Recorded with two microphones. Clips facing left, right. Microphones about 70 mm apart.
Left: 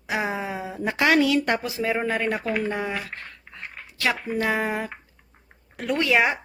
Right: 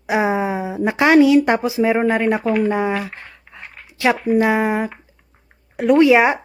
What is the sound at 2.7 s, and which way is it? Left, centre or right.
Speech, right.